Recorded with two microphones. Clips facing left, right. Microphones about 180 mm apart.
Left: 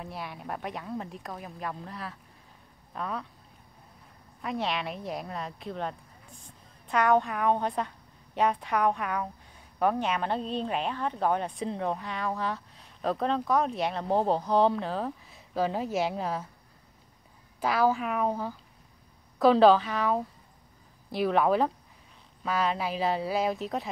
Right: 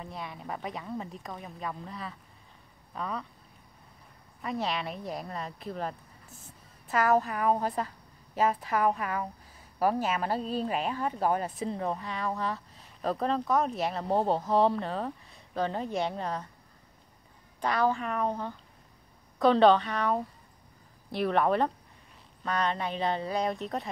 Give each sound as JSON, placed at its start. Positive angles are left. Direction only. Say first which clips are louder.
{"t": 0.0, "sound": "speech", "louder": "left 1 dB", "side_deg": 5}
{"t": 4.4, "sound": "speech", "louder": "left 1 dB", "side_deg": 0}
{"t": 17.6, "sound": "speech", "louder": "left 2 dB", "side_deg": 5}